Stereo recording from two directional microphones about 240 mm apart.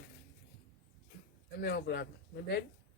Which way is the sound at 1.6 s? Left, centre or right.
Left.